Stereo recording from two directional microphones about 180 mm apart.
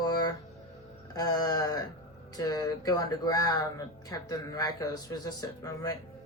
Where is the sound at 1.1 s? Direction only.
20° left (ahead or behind).